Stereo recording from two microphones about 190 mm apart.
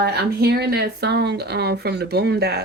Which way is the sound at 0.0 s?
60° right (ahead or behind).